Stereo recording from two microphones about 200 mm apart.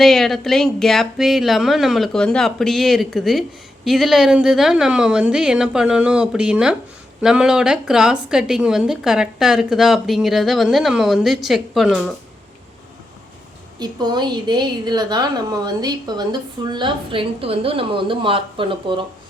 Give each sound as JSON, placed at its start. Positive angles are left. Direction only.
{"t": 0.0, "sound": "a woman's voice", "side_deg": 0}
{"t": 13.7, "sound": "a woman's voice", "side_deg": -20}